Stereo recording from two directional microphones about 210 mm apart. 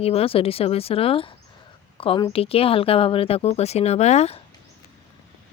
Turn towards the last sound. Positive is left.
turn(degrees=30)  # may be behind; listen again after turning